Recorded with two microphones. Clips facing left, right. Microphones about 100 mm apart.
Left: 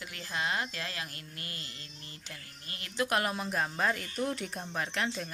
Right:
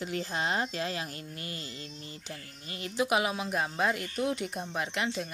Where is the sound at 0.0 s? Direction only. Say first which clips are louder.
Right 4 dB; 30° right (ahead or behind).